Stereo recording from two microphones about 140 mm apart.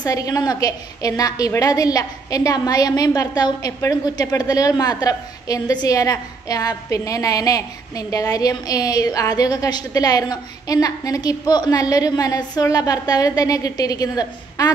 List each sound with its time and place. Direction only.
0.0 s a woman's voice: 25° left (ahead or behind)